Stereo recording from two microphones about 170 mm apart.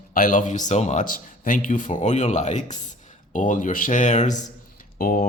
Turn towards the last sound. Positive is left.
turn(degrees=60)  # may be behind; listen again after turning